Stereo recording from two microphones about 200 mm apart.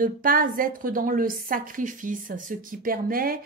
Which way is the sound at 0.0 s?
45° right (ahead or behind).